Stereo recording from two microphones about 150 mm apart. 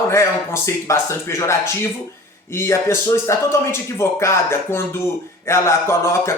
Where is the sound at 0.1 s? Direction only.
20° left (ahead or behind).